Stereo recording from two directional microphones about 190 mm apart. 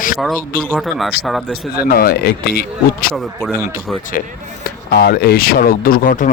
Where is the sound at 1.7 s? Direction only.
50° left (ahead or behind).